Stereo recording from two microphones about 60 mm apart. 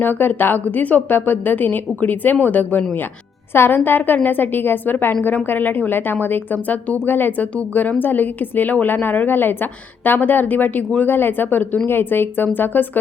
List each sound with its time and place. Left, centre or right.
0.0 s a woman's voice: left
3.5 s speech: left